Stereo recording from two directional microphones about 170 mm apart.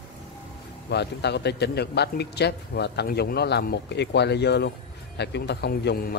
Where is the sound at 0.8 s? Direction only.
80° left.